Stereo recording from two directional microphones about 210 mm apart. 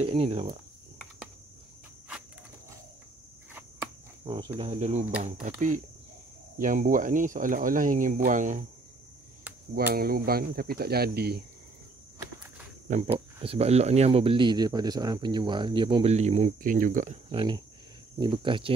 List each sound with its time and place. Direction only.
0.0 s speech: 30° right (ahead or behind)
4.2 s speech: 20° right (ahead or behind)
9.9 s speech: 45° right (ahead or behind)
13.0 s speech: 25° right (ahead or behind)
17.3 s speech: 25° right (ahead or behind)